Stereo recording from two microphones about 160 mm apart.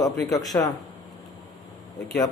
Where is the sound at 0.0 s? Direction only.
20° left (ahead or behind).